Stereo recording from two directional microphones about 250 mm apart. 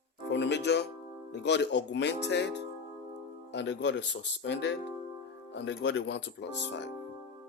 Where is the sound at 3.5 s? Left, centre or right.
Left.